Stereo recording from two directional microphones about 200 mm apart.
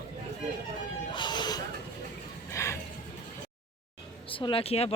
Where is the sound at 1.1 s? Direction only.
20° left (ahead or behind).